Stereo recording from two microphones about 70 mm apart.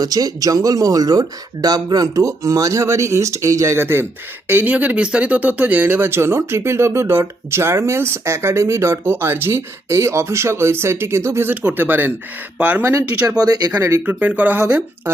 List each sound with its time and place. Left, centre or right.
0.0 s speech: right
6.0 s speech: right
11.4 s speech: right
12.8 s speech: right
13.4 s speech: right
14.0 s speech: right